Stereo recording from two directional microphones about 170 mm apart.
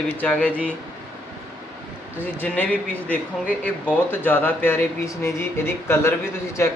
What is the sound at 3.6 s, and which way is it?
Speech, 10° left (ahead or behind).